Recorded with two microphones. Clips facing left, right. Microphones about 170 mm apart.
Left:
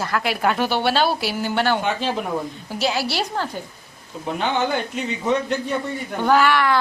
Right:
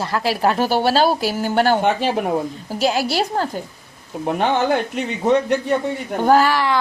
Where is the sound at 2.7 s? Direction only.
45° right (ahead or behind).